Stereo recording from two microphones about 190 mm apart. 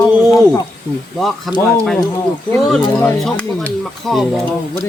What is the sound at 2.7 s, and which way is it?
Speech, 5° left (ahead or behind).